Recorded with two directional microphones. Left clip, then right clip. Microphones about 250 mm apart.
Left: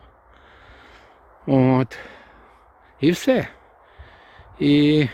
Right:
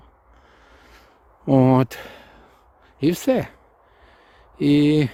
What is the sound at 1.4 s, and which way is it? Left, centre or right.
Speech, centre.